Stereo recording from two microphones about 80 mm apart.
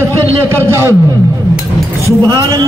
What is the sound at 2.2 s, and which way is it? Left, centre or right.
Speech, right.